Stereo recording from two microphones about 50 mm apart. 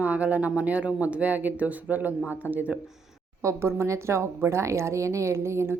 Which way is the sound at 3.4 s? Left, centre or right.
Right.